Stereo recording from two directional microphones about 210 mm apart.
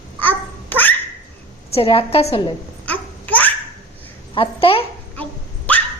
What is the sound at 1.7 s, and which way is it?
Speech, 25° left (ahead or behind).